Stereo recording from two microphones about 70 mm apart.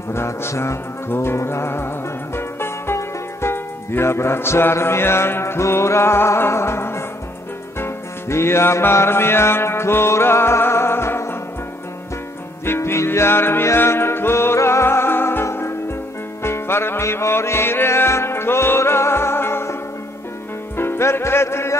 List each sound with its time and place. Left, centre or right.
0.1 s music: left
2.3 s speech: left
7.8 s music: left
12.6 s music: left